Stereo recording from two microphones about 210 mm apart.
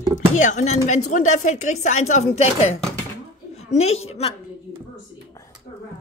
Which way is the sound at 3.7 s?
30° left (ahead or behind).